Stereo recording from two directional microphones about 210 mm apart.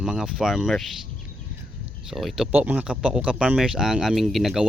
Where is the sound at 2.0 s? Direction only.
Centre (ahead or behind).